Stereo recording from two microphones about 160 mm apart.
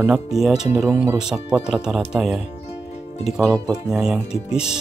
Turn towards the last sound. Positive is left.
turn(degrees=-5)  # may be behind; listen again after turning